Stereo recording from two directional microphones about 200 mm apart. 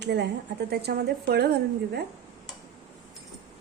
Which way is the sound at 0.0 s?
55° right (ahead or behind).